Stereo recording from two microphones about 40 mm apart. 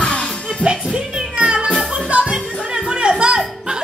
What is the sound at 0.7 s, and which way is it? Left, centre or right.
Music, right.